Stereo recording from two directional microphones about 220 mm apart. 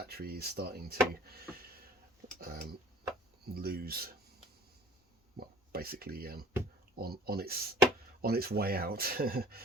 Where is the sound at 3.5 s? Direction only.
45° right (ahead or behind).